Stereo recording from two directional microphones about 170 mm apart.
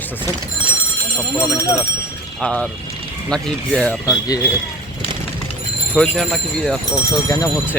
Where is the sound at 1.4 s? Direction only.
15° left (ahead or behind).